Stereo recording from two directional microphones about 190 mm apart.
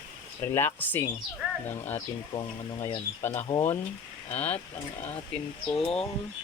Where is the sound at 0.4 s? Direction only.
10° left (ahead or behind).